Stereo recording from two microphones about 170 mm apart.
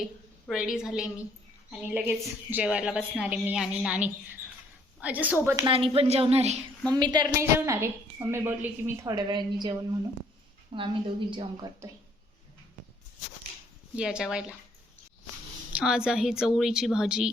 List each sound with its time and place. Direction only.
0.0 s a woman's voice: centre (ahead or behind)
5.6 s a woman's voice: 35° right (ahead or behind)
6.9 s a woman's voice: 25° right (ahead or behind)
9.0 s a woman's voice: 25° right (ahead or behind)
13.9 s a woman's voice: 5° right (ahead or behind)
15.7 s a woman's voice: 5° right (ahead or behind)